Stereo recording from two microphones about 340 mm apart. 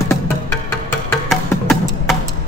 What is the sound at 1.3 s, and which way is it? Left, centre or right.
Music, centre.